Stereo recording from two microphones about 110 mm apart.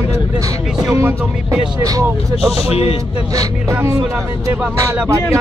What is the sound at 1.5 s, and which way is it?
Speech, 30° right (ahead or behind).